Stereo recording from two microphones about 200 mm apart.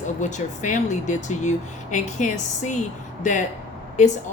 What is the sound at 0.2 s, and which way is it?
A woman's voice, 35° left (ahead or behind).